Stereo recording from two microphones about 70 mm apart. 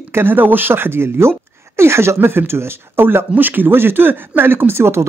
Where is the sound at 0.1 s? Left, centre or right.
Right.